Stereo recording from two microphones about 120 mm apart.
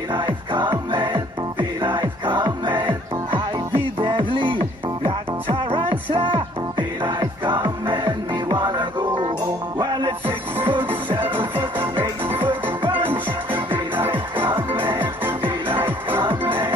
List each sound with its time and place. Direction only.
0.1 s music: 45° right (ahead or behind)
12.3 s music: 15° right (ahead or behind)